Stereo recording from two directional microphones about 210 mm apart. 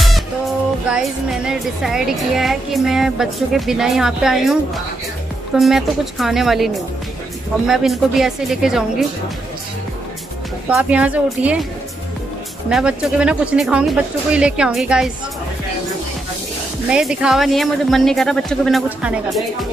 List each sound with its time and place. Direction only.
0.0 s speech: centre (ahead or behind)
5.6 s speech: centre (ahead or behind)
10.7 s speech: 5° right (ahead or behind)
12.6 s speech: 5° right (ahead or behind)
16.9 s speech: 5° right (ahead or behind)